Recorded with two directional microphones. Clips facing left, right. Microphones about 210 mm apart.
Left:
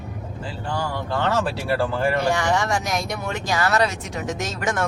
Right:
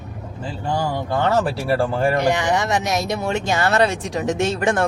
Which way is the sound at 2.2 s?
20° right (ahead or behind).